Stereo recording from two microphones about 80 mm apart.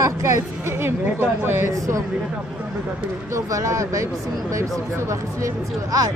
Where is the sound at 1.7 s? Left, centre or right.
Right.